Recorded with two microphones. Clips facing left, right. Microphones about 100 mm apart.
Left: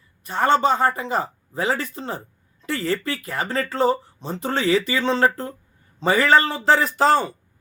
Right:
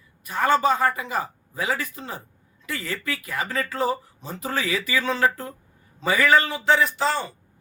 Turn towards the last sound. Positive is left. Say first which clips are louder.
# left 5 dB
turn(degrees=45)  # may be behind; listen again after turning